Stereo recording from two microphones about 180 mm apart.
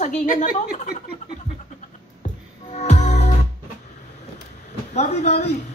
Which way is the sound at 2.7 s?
40° left (ahead or behind).